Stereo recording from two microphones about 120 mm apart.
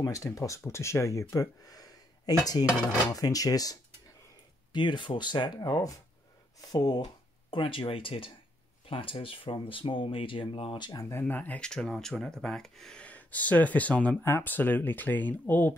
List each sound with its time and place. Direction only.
0.0 s speech: 25° left (ahead or behind)
1.3 s a sound: 30° left (ahead or behind)
3.1 s speech: 30° left (ahead or behind)
4.7 s speech: 40° left (ahead or behind)
7.5 s speech: 50° left (ahead or behind)
11.1 s speech: 20° left (ahead or behind)